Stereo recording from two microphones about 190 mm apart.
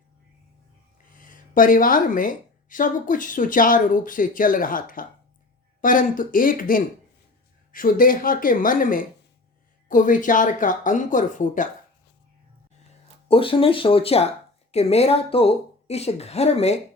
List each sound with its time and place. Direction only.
1.1 s a woman's voice: 45° left (ahead or behind)
13.2 s speech: 30° left (ahead or behind)